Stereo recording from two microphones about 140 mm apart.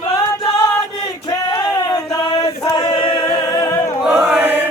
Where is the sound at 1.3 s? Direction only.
30° left (ahead or behind).